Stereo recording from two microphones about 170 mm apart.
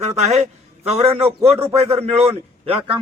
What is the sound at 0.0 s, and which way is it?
A man's voice, 40° right (ahead or behind).